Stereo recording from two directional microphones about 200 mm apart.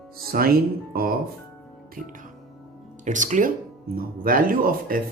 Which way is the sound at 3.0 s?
40° right (ahead or behind).